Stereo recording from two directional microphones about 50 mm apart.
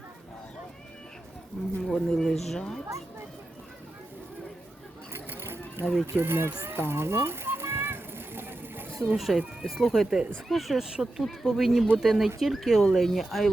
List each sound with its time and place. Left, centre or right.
1.6 s speech: centre
5.1 s a sound: right
6.1 s speech: right
6.7 s children playing: right
9.1 s speech: centre
9.8 s speech: centre
10.8 s speech: centre